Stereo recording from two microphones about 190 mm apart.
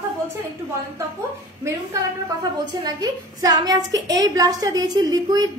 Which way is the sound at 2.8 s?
20° right (ahead or behind).